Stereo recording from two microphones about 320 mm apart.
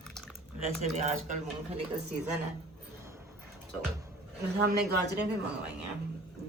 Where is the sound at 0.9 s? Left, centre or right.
Right.